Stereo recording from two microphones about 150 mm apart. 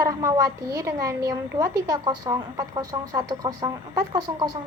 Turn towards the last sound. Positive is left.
turn(degrees=-25)  # may be behind; listen again after turning